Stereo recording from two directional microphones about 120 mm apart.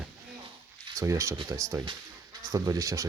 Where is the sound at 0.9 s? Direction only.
25° right (ahead or behind).